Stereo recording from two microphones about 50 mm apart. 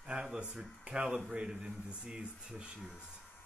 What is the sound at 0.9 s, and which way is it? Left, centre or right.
A man's voice, right.